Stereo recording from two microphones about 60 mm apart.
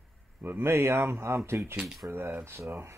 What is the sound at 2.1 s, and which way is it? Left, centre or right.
Speech, right.